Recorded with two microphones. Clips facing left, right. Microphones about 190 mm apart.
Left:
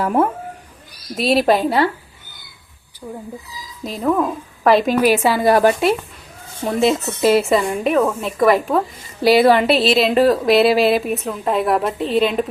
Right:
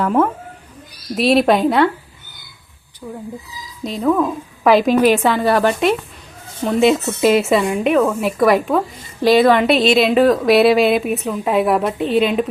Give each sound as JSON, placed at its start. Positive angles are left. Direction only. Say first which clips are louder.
{"t": 0.0, "sound": "speech", "louder": "right 1 dB", "side_deg": 10}
{"t": 1.1, "sound": "a woman's voice", "louder": "right 2 dB", "side_deg": 0}
{"t": 3.0, "sound": "a woman's voice", "louder": "right 1 dB", "side_deg": 15}
{"t": 3.8, "sound": "a woman's voice", "louder": "right 2 dB", "side_deg": 0}
{"t": 6.7, "sound": "a woman's voice", "louder": "right 3 dB", "side_deg": 0}